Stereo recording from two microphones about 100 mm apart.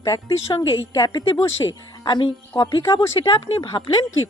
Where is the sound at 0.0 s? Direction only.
35° left (ahead or behind).